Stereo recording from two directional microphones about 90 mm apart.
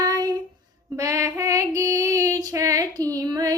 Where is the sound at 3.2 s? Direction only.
40° right (ahead or behind).